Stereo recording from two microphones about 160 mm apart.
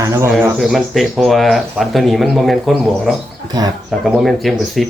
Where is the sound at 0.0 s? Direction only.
20° right (ahead or behind).